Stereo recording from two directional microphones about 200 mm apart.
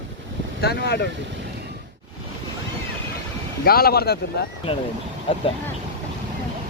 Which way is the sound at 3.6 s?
50° left (ahead or behind).